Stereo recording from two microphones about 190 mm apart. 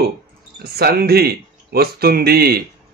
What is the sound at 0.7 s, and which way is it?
Speech, 55° right (ahead or behind).